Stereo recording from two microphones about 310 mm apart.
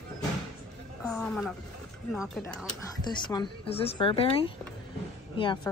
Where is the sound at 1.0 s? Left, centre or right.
Centre.